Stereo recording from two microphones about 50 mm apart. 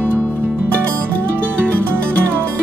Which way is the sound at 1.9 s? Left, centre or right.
Right.